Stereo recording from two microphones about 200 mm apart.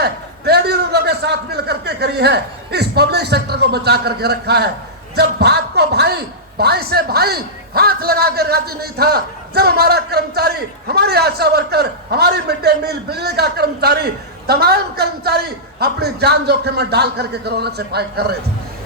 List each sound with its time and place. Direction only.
0.0 s a man's voice: 55° right (ahead or behind)